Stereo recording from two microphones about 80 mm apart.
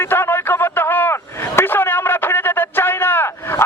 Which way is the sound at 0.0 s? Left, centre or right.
Left.